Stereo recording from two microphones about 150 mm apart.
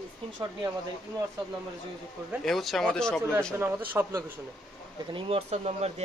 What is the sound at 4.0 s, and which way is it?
Speech, 15° right (ahead or behind).